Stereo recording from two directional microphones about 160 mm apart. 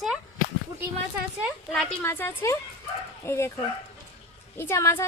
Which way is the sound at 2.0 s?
15° left (ahead or behind).